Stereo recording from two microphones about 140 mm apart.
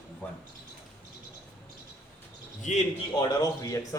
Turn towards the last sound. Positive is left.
turn(degrees=25)  # may be behind; listen again after turning